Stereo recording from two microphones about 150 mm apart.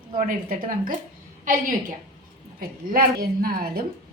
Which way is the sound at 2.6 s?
75° right (ahead or behind).